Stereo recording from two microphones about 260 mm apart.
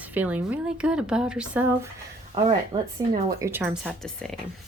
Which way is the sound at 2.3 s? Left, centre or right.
Right.